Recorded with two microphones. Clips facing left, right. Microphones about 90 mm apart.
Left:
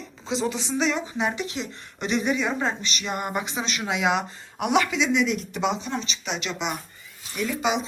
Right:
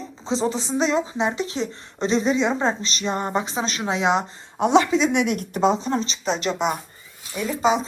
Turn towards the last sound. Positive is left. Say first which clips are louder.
# right 4 dB
turn(degrees=-35)  # may be behind; listen again after turning